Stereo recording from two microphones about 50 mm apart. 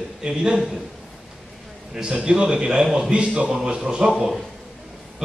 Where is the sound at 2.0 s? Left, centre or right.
Centre.